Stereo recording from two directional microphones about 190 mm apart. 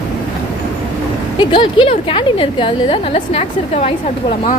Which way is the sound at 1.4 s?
25° left (ahead or behind).